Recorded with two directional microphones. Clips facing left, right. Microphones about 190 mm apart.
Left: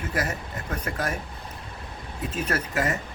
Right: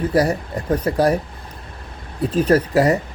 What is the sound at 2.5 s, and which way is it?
Speech, 35° right (ahead or behind).